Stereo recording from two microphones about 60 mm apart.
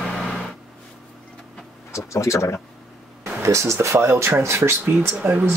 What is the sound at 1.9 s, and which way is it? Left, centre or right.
Speech, left.